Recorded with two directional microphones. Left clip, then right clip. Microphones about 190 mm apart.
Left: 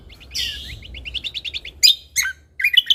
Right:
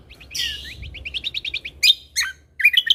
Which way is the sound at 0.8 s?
20° right (ahead or behind).